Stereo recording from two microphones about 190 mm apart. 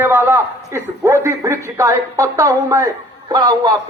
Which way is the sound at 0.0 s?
15° right (ahead or behind).